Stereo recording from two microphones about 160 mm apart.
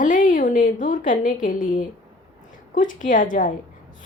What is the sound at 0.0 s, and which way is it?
A woman's voice, 55° left (ahead or behind).